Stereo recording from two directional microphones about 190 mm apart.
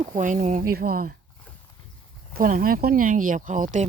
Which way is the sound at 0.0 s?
45° right (ahead or behind).